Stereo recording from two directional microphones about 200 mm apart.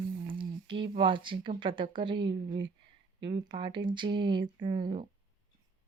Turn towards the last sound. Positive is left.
turn(degrees=-25)  # may be behind; listen again after turning